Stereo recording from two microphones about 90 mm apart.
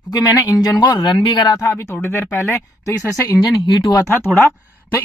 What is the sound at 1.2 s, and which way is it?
Speech, 65° left (ahead or behind).